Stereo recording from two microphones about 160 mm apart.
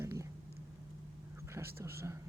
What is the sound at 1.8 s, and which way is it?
Speech, 15° right (ahead or behind).